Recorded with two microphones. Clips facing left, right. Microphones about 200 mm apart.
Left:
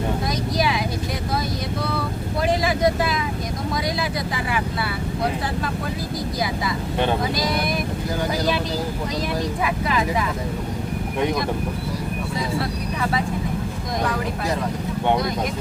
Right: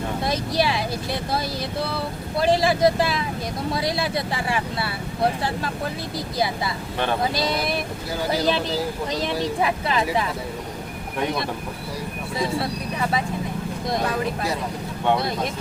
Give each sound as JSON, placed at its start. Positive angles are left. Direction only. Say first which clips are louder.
{"t": 0.3, "sound": "vehicle", "louder": "even", "side_deg": -30}
{"t": 2.4, "sound": "vehicle", "louder": "right 2 dB", "side_deg": -30}
{"t": 9.4, "sound": "speech", "louder": "right 1 dB", "side_deg": -30}